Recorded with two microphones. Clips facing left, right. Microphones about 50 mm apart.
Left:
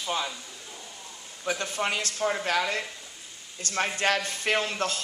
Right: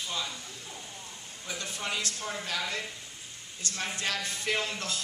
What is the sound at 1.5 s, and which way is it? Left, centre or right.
Speech, left.